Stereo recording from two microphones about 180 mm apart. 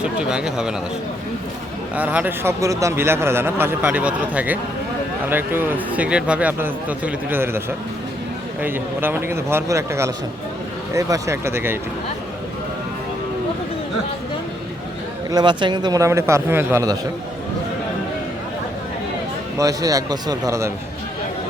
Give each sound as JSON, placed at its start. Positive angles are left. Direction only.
{"t": 0.0, "sound": "speech", "side_deg": -5}
{"t": 2.0, "sound": "a man's voice", "side_deg": -10}
{"t": 8.6, "sound": "a man's voice", "side_deg": -10}
{"t": 15.3, "sound": "a man's voice", "side_deg": -25}
{"t": 19.5, "sound": "a man's voice", "side_deg": -20}